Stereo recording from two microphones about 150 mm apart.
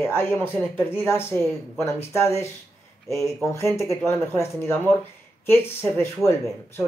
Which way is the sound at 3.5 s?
15° left (ahead or behind).